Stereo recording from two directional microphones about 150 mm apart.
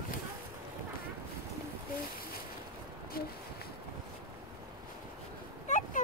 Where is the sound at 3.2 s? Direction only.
85° left.